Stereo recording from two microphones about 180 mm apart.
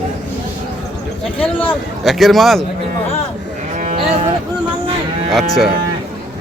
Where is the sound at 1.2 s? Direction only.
5° left (ahead or behind).